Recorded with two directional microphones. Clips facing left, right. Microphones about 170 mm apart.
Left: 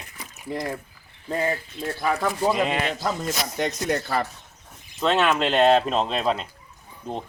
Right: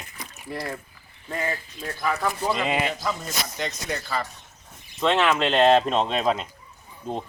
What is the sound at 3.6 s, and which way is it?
Speech, 60° left (ahead or behind).